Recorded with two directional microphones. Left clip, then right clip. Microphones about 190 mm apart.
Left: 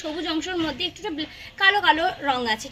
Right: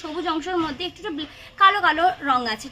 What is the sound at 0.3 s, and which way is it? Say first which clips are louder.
A woman's voice: right 3 dB; 15° right (ahead or behind).